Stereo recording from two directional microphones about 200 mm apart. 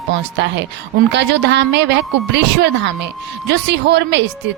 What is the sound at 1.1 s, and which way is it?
Speech, 60° right (ahead or behind).